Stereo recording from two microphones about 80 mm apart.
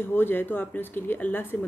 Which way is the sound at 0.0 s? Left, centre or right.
Left.